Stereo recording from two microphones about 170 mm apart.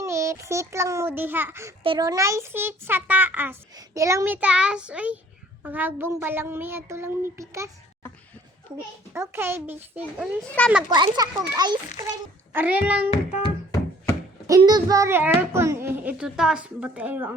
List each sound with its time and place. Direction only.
0.0 s a child's voice: 20° right (ahead or behind)
1.8 s a child's voice: 25° right (ahead or behind)
9.1 s a child's voice: 15° right (ahead or behind)
10.4 s a child's voice: 10° left (ahead or behind)
10.8 s a child's voice: 25° right (ahead or behind)
12.5 s a child's voice: 10° right (ahead or behind)
13.1 s child singing: 40° left (ahead or behind)
13.7 s music: 15° left (ahead or behind)
14.6 s a child's voice: 20° right (ahead or behind)